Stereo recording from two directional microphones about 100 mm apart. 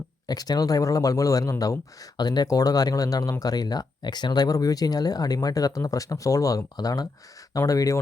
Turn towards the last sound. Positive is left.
turn(degrees=35)  # may be behind; listen again after turning